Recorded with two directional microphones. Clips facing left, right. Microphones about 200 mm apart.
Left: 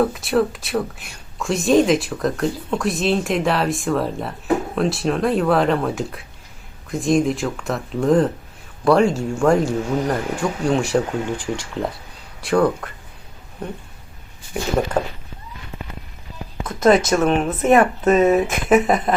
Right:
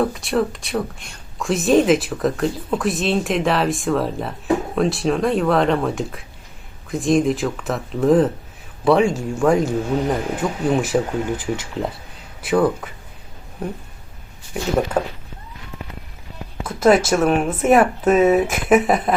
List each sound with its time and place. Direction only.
0.0 s speech: centre (ahead or behind)
14.8 s speech: 5° right (ahead or behind)
16.6 s speech: 5° right (ahead or behind)